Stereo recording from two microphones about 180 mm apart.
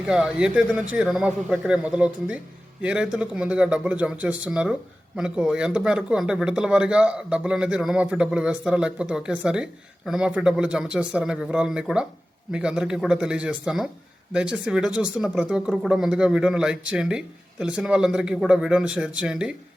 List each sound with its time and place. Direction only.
0.0 s speech: 5° right (ahead or behind)